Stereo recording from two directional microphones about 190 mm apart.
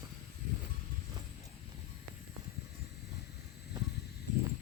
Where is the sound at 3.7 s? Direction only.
20° right (ahead or behind).